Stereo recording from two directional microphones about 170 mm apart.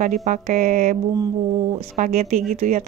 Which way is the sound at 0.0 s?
50° right (ahead or behind).